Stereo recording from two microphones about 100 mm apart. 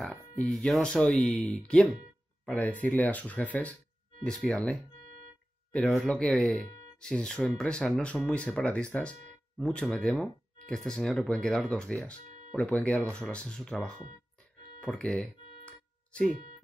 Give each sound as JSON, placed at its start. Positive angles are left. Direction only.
{"t": 0.0, "sound": "speech", "side_deg": 5}
{"t": 14.8, "sound": "music", "side_deg": 10}